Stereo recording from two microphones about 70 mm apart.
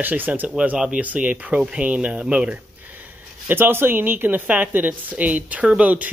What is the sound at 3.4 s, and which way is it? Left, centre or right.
A woman's voice, right.